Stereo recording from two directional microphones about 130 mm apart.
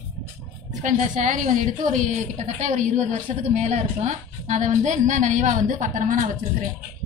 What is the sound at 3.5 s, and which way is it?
A woman's voice, 60° right (ahead or behind).